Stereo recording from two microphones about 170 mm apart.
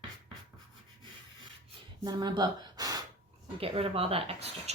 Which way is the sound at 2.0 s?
25° right (ahead or behind).